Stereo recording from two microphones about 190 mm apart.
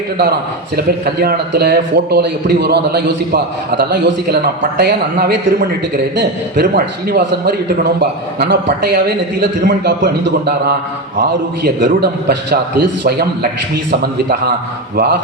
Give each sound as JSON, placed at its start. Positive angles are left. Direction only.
{"t": 1.0, "sound": "a man's voice", "side_deg": -55}
{"t": 11.2, "sound": "a man's voice", "side_deg": -50}
{"t": 13.1, "sound": "a man's voice", "side_deg": -55}